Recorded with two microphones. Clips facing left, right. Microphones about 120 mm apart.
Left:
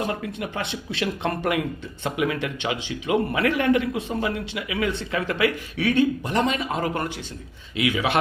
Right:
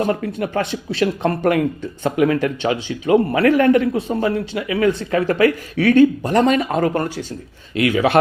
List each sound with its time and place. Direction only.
0.0 s a man's voice: 45° right (ahead or behind)
6.9 s a man's voice: 40° right (ahead or behind)